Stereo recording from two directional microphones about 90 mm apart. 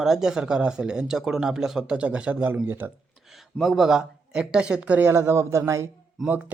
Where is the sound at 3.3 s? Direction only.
Centre (ahead or behind); by 5.9 s 30° right (ahead or behind).